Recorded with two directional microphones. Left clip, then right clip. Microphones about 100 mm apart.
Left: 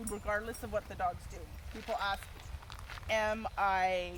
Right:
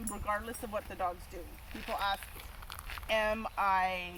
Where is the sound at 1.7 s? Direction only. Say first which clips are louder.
Left 1 dB; 20° right (ahead or behind).